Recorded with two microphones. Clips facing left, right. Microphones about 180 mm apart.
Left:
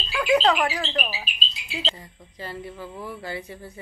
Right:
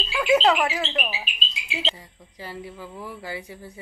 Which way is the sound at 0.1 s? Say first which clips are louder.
Right 1 dB; 20° right (ahead or behind).